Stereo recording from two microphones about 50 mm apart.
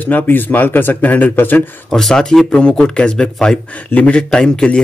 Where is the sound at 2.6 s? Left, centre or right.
Left.